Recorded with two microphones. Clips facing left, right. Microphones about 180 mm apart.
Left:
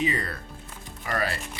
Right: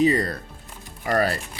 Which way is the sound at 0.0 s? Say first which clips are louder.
Right 8 dB; 40° right (ahead or behind).